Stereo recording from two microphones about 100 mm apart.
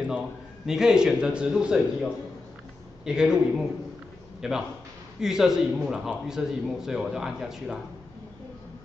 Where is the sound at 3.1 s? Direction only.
5° right (ahead or behind).